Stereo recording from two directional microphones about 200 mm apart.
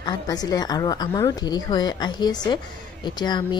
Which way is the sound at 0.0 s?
20° left (ahead or behind).